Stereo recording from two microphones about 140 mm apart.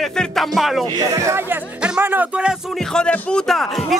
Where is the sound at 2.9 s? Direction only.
5° left (ahead or behind).